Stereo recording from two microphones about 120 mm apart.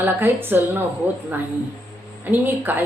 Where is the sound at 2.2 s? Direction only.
15° right (ahead or behind).